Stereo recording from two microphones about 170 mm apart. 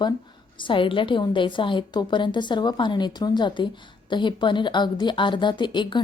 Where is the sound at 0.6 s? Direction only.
30° left (ahead or behind).